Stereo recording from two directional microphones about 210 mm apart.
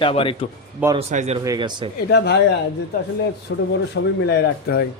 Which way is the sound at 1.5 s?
20° right (ahead or behind).